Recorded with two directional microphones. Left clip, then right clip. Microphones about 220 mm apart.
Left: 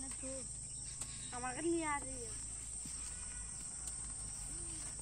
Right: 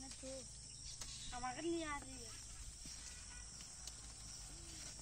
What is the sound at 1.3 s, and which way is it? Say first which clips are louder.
Speech: left 5 dB; 55° right (ahead or behind).